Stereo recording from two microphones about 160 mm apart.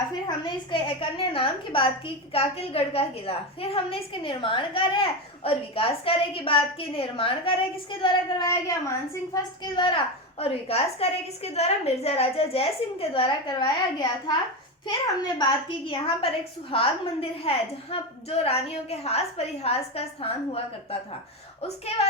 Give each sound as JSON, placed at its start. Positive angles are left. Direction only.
{"t": 0.1, "sound": "a woman's voice", "side_deg": 25}